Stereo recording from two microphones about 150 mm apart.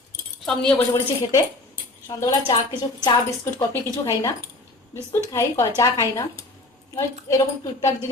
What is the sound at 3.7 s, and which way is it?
Speech, 20° left (ahead or behind).